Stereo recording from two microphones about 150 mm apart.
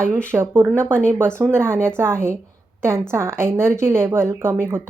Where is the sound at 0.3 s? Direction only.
15° right (ahead or behind).